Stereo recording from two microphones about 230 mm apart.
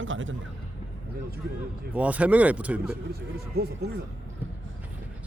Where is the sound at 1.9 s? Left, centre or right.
Centre.